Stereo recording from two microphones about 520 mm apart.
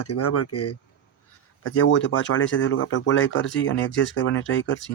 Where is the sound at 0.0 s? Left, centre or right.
Left.